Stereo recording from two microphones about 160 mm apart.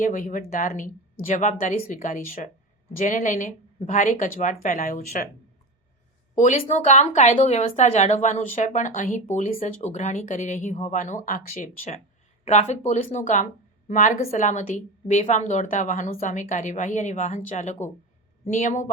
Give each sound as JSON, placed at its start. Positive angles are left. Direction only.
{"t": 0.0, "sound": "speech", "side_deg": 50}
{"t": 6.3, "sound": "speech", "side_deg": 50}